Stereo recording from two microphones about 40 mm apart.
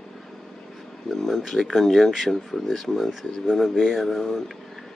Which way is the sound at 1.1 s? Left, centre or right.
Centre.